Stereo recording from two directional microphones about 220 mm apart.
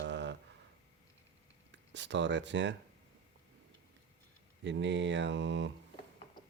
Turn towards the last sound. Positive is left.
turn(degrees=-55)  # may be behind; listen again after turning